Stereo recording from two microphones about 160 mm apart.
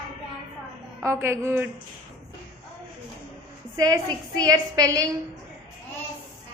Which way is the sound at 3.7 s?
20° right (ahead or behind).